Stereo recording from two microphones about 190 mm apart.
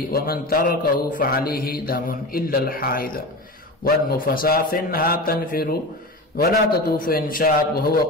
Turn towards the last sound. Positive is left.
turn(degrees=50)  # may be behind; listen again after turning